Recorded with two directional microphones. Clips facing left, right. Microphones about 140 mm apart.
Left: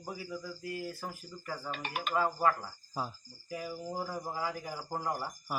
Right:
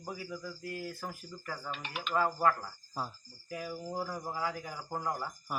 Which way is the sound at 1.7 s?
50° left (ahead or behind).